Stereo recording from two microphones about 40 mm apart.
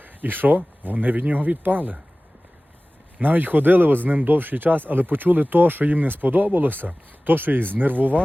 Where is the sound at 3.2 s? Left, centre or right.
Right.